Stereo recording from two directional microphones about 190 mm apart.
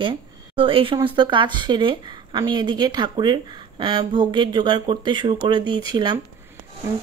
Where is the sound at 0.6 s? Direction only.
25° right (ahead or behind).